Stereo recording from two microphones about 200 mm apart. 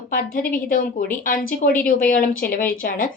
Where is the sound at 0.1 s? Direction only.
45° left (ahead or behind).